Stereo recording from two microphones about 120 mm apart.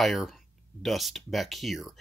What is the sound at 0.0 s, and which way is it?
Speech, centre (ahead or behind).